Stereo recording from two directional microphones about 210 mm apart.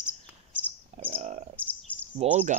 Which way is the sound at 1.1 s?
30° right (ahead or behind).